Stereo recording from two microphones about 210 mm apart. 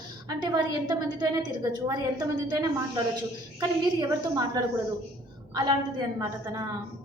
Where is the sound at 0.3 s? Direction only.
20° right (ahead or behind).